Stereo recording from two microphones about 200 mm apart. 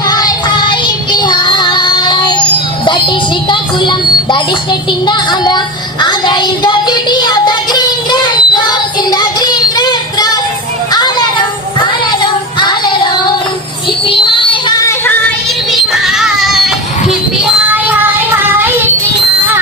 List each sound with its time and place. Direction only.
0.1 s music: 20° left (ahead or behind)
5.0 s child singing: 20° left (ahead or behind)
10.9 s children playing: 20° left (ahead or behind)
12.2 s child singing: 20° left (ahead or behind)
14.1 s music: 25° left (ahead or behind)
15.7 s children playing: centre (ahead or behind)